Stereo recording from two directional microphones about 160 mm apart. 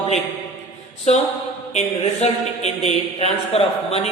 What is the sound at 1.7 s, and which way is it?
A man's voice, 45° left (ahead or behind).